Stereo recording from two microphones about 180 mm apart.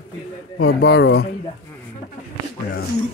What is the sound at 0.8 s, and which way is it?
Speech, 75° left (ahead or behind).